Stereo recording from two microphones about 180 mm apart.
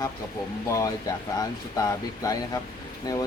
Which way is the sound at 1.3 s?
20° left (ahead or behind).